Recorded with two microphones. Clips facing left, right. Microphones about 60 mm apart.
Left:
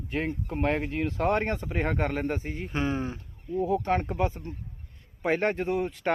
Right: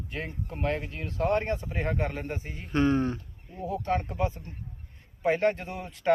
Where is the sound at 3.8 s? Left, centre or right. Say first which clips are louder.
Left 2 dB; left.